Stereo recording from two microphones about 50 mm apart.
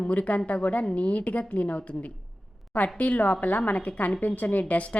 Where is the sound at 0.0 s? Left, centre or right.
Left.